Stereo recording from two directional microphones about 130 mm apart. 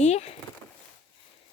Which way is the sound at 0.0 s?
60° left (ahead or behind).